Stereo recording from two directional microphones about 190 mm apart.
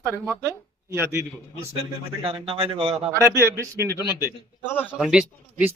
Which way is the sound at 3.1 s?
15° right (ahead or behind).